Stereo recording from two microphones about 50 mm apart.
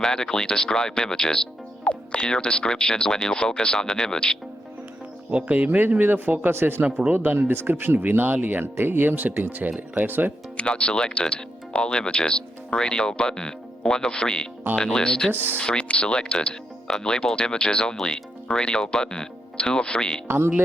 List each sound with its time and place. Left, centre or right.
0.0 s speech: centre
5.3 s speech: right
5.5 s speech: right
10.6 s speech: left
15.3 s speech: right
15.6 s speech: left
20.2 s speech: right